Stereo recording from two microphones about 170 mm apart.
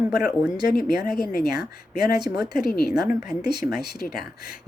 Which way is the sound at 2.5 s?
65° left (ahead or behind).